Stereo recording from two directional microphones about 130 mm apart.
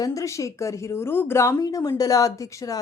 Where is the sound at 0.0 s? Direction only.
25° left (ahead or behind).